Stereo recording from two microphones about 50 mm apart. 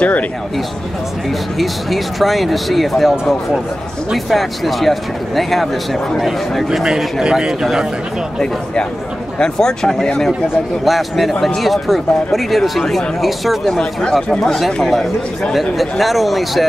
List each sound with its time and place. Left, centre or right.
1.6 s speech: centre
6.7 s a man's voice: centre
9.4 s speech: centre
13.7 s speech: centre